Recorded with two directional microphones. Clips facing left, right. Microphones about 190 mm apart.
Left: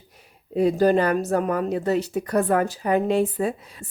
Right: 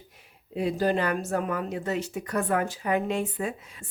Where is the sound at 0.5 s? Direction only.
45° left (ahead or behind).